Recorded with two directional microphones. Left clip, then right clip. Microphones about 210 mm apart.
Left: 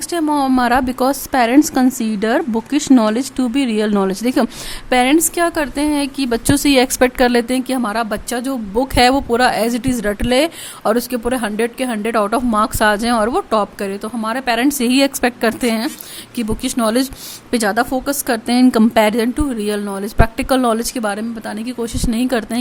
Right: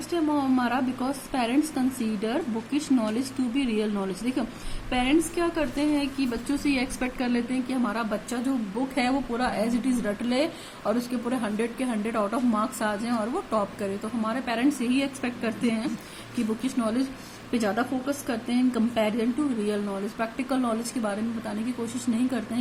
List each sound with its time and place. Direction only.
0.1 s a woman's voice: 55° left (ahead or behind)